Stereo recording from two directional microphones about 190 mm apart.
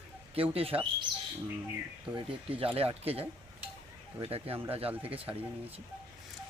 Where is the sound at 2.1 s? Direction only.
30° right (ahead or behind).